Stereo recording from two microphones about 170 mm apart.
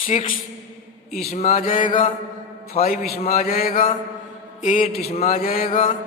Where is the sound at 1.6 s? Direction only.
55° left (ahead or behind).